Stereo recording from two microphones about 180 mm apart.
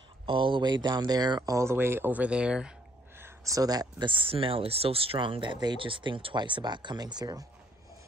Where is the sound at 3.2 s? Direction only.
20° right (ahead or behind).